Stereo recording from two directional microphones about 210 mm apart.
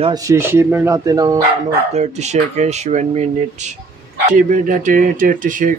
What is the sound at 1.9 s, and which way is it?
Speech, 30° right (ahead or behind).